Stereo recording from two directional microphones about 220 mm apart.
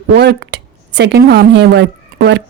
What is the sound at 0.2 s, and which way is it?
A woman's voice, 50° right (ahead or behind).